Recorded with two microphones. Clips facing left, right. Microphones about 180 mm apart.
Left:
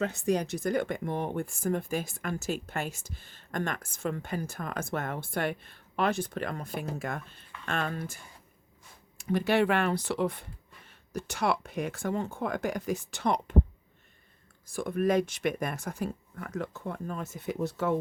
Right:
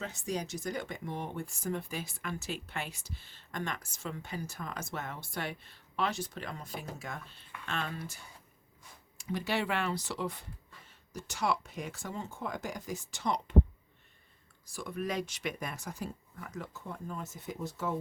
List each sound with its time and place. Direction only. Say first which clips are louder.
0.0 s speech: left 8 dB; 60° left (ahead or behind)
14.7 s speech: left 9 dB; 50° left (ahead or behind)